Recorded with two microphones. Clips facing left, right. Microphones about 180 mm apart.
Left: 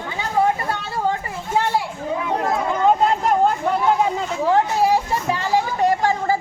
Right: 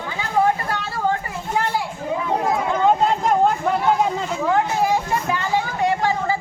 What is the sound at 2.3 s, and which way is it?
Chatter, 15° right (ahead or behind).